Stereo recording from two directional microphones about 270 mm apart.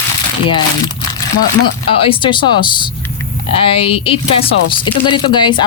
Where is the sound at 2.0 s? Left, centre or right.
Centre.